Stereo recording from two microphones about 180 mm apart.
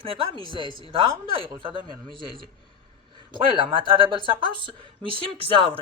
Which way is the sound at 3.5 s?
30° right (ahead or behind).